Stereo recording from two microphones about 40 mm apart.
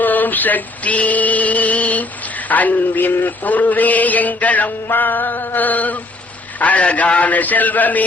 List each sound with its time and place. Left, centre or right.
0.0 s male singing: left
2.5 s mantra: left
6.6 s a man's voice: left